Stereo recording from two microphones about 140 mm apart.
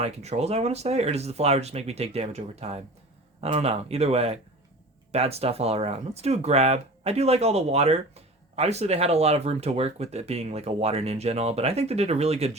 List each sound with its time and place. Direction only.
0.0 s speech: 50° right (ahead or behind)